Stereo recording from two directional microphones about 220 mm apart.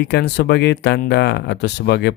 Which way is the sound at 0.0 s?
50° left (ahead or behind).